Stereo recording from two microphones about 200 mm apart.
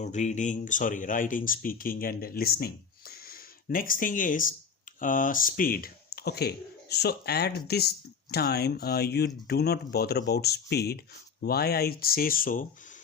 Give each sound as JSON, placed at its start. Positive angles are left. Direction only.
{"t": 0.0, "sound": "speech", "side_deg": 35}